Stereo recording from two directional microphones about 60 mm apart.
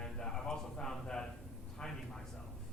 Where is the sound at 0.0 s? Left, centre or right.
Centre.